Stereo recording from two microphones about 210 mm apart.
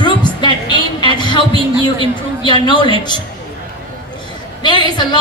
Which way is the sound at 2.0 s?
20° left (ahead or behind).